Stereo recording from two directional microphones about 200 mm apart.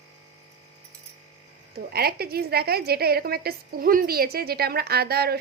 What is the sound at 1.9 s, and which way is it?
A woman's voice, 50° right (ahead or behind).